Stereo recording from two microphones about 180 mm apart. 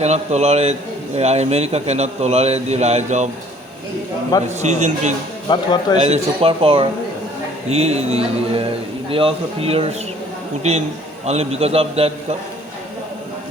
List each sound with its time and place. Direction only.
0.0 s a man's voice: 35° right (ahead or behind)
4.4 s a man's voice: 40° right (ahead or behind)
5.5 s speech: 20° left (ahead or behind)
6.1 s a man's voice: 30° right (ahead or behind)